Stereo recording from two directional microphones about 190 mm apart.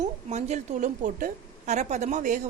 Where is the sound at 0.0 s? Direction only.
35° right (ahead or behind).